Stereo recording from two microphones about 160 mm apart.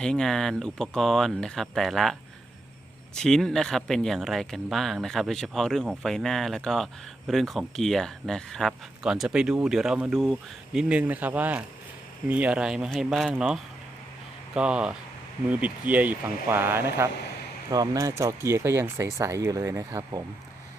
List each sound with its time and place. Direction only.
0.0 s speech: 5° left (ahead or behind)
3.2 s speech: 5° left (ahead or behind); by 20.2 s 20° right (ahead or behind)